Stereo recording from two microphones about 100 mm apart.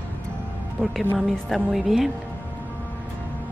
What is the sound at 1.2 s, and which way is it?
Speech, centre (ahead or behind).